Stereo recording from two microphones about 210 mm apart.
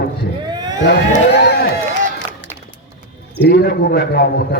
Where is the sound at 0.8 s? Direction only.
55° left (ahead or behind).